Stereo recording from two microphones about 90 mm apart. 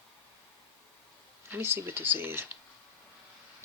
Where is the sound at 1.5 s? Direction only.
25° right (ahead or behind).